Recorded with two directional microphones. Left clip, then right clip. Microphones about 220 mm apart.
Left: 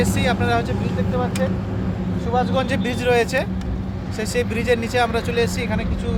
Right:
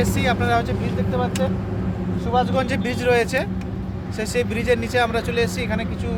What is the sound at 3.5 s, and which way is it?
Vehicle, 35° left (ahead or behind).